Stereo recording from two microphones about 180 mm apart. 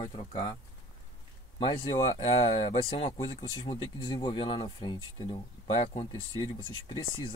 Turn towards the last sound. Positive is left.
turn(degrees=25)  # may be behind; listen again after turning